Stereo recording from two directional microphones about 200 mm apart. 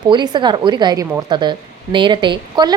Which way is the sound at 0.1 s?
20° right (ahead or behind).